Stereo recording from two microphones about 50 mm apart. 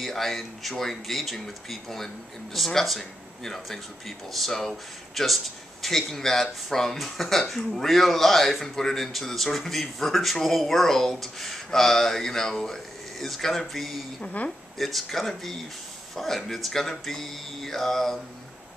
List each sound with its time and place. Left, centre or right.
0.0 s speech: centre
14.2 s a woman's voice: left
14.8 s speech: centre